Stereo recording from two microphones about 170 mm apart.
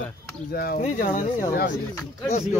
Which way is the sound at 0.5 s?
60° left (ahead or behind).